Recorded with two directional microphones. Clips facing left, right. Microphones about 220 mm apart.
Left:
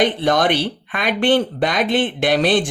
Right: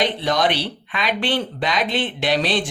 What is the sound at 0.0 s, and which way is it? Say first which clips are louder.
Speech: left 4 dB; 50° left (ahead or behind).